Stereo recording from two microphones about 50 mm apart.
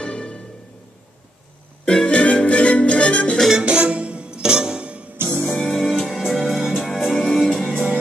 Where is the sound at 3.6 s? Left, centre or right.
Right.